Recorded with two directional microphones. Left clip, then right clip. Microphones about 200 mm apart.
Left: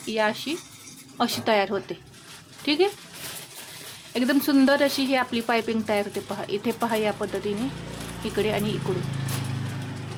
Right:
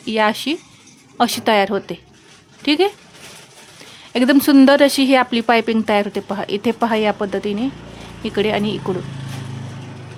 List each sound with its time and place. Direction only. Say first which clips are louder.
0.0 s speech: right 7 dB; 40° right (ahead or behind)
4.1 s speech: right 9 dB; 40° right (ahead or behind)